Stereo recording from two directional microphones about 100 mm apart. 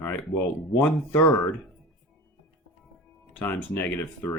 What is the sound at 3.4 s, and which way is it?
Speech, 20° left (ahead or behind).